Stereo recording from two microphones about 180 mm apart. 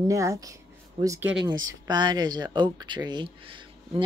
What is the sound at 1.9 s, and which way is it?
Speech, 25° right (ahead or behind).